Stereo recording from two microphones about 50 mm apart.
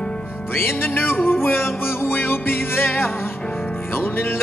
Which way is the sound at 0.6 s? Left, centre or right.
Left.